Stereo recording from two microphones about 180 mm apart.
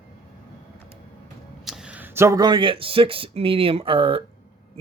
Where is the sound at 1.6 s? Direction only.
5° right (ahead or behind).